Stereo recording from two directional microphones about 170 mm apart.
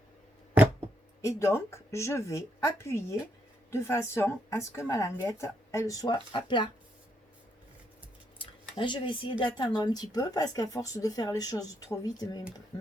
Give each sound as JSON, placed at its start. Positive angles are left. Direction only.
{"t": 1.2, "sound": "speech", "side_deg": 15}
{"t": 8.7, "sound": "speech", "side_deg": 30}